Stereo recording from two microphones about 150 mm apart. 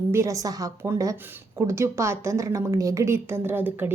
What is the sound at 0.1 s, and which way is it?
A woman's voice, 20° right (ahead or behind).